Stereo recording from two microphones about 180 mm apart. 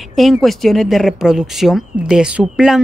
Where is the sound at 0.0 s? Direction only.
Centre (ahead or behind).